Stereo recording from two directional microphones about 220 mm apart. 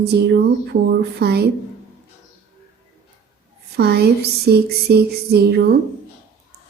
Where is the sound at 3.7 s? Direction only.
45° right (ahead or behind).